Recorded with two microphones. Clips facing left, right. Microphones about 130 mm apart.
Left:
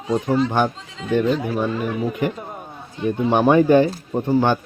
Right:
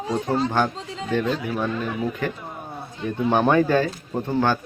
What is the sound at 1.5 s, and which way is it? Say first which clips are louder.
Speech: left 3 dB; centre (ahead or behind).